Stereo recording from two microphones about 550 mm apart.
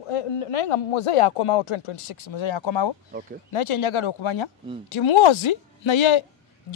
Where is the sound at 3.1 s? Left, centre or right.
Centre.